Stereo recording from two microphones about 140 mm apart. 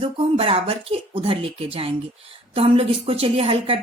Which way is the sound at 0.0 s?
40° right (ahead or behind).